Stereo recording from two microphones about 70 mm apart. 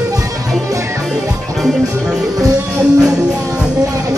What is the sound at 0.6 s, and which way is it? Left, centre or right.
Music, right.